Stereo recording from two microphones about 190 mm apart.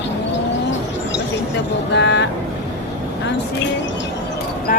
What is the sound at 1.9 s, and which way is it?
Speech, 70° left (ahead or behind).